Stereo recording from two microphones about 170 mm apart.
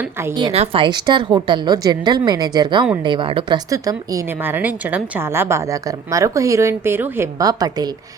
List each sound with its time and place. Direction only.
0.0 s a woman's voice: 15° right (ahead or behind)
0.3 s a woman's voice: 30° right (ahead or behind)
3.7 s a woman's voice: 20° right (ahead or behind)